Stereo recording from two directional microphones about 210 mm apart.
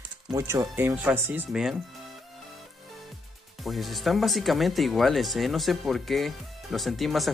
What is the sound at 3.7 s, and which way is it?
Speech, centre (ahead or behind).